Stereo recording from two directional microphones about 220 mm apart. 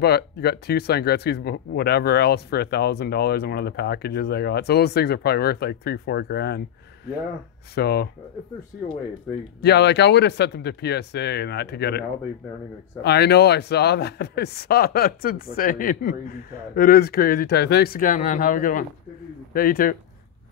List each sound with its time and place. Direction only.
0.0 s speech: 45° left (ahead or behind)
7.7 s speech: 45° left (ahead or behind)
9.6 s speech: 50° left (ahead or behind)
13.0 s speech: 50° left (ahead or behind)